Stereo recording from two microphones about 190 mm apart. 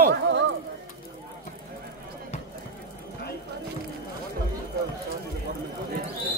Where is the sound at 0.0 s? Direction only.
70° right (ahead or behind).